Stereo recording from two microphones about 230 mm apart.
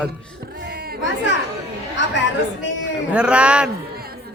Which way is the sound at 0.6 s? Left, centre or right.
Right.